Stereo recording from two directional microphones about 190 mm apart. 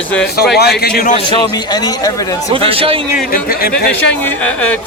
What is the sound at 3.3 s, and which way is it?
Speech, 50° left (ahead or behind).